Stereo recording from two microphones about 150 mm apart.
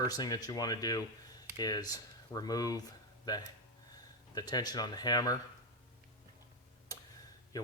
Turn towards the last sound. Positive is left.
turn(degrees=25)  # may be behind; listen again after turning